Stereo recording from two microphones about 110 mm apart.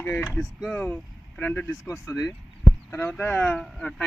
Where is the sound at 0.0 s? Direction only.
20° left (ahead or behind).